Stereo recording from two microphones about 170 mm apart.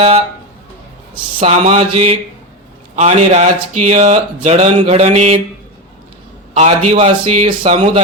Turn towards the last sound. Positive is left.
turn(degrees=-40)  # may be behind; listen again after turning